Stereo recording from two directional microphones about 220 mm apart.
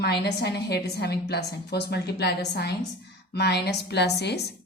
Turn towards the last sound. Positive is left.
turn(degrees=50)  # may be behind; listen again after turning